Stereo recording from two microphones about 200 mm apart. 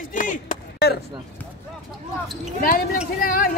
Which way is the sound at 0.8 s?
50° left (ahead or behind).